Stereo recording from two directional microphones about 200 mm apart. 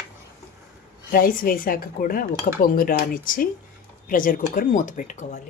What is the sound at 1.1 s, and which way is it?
Speech, 45° left (ahead or behind).